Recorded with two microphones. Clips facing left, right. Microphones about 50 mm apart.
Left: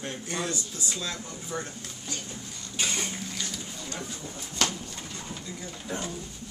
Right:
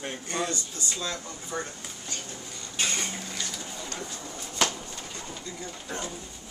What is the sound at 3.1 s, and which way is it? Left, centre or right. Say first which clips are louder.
Dishes: even; centre.